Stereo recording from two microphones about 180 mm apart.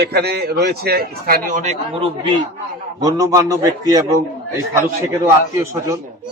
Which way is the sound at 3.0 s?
20° right (ahead or behind).